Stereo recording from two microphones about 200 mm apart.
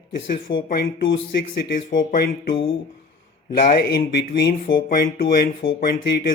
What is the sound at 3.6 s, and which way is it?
Speech, 55° left (ahead or behind).